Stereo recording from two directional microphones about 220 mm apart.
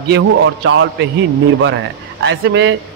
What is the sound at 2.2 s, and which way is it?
Speech, 55° right (ahead or behind).